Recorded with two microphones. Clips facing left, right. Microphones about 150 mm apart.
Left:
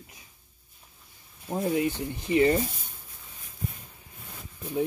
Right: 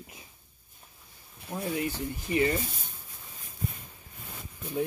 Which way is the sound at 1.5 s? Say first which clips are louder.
Left 5 dB; 25° left (ahead or behind).